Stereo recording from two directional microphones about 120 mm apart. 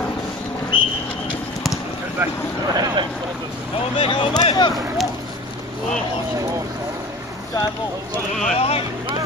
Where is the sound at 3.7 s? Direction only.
50° left (ahead or behind).